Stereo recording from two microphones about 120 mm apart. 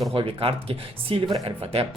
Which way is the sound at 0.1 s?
50° right (ahead or behind).